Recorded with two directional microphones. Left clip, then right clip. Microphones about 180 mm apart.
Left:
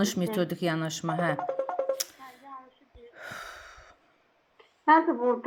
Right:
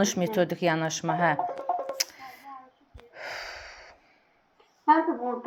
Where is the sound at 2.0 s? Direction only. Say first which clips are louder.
Right 5 dB; 30° left (ahead or behind).